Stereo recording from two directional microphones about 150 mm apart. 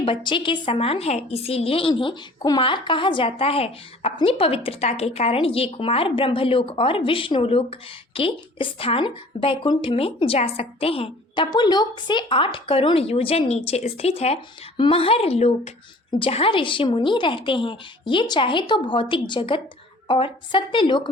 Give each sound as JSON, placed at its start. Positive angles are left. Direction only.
{"t": 0.0, "sound": "a woman's voice", "side_deg": 35}